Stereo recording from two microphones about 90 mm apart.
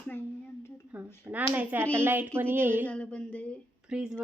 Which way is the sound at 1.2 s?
20° right (ahead or behind).